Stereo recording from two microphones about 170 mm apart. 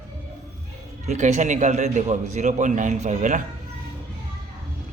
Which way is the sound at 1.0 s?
45° right (ahead or behind).